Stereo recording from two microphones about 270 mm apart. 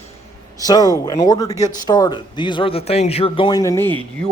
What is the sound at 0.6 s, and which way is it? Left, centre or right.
Speech, centre.